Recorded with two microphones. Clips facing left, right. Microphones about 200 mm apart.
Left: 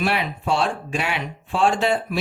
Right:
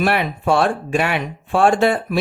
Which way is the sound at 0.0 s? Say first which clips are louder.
Right 5 dB; 55° right (ahead or behind).